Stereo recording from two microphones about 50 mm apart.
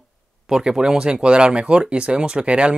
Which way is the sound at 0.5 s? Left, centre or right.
Centre.